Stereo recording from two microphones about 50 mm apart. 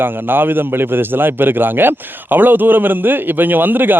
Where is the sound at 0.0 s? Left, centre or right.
Right.